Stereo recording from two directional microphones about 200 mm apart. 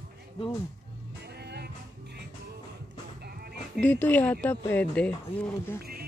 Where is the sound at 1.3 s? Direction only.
55° right (ahead or behind).